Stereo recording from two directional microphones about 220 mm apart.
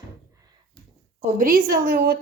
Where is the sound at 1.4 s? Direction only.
40° right (ahead or behind).